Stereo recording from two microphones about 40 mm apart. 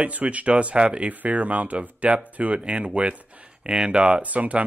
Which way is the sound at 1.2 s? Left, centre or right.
Right.